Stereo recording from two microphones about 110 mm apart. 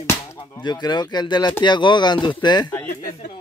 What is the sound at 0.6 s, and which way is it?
Speech, 40° left (ahead or behind).